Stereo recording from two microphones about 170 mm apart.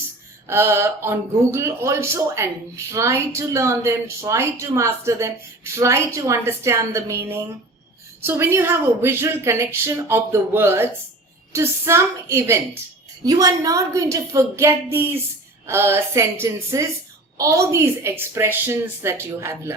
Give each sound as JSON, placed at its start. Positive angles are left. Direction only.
{"t": 0.4, "sound": "a woman's voice", "side_deg": -15}